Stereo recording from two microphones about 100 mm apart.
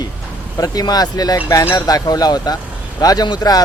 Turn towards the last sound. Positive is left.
turn(degrees=40)  # may be behind; listen again after turning